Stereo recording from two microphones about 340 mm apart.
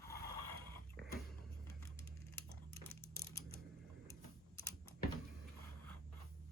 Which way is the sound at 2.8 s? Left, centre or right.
Centre.